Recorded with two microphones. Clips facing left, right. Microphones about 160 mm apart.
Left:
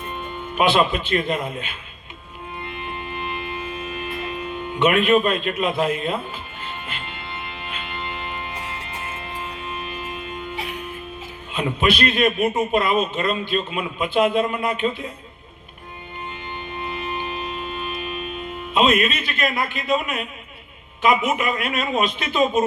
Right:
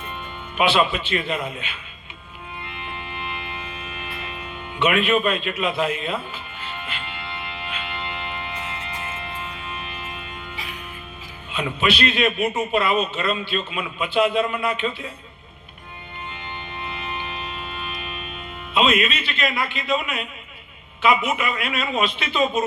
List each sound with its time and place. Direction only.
0.5 s a man's voice: 45° left (ahead or behind)
3.2 s music: 45° left (ahead or behind)
4.8 s a man's voice: 50° left (ahead or behind)
9.7 s music: 45° left (ahead or behind)
11.5 s a man's voice: 45° left (ahead or behind)
18.7 s a man's voice: 45° left (ahead or behind)